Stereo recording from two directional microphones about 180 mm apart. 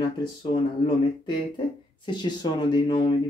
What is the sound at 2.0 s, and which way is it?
Speech, 25° left (ahead or behind).